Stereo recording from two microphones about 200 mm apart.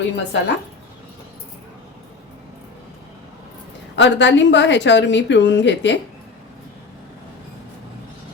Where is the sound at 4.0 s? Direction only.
60° left (ahead or behind).